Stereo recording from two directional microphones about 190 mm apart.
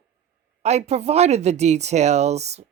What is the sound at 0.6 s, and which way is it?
Speech, 35° right (ahead or behind).